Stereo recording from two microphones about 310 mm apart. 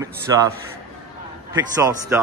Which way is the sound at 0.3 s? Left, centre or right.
Centre.